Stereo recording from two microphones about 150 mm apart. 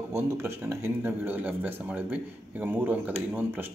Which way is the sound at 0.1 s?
15° right (ahead or behind).